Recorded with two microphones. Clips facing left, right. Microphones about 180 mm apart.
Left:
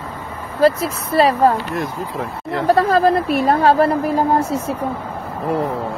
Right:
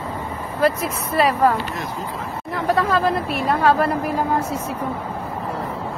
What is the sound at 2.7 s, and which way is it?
A woman's voice, 40° left (ahead or behind).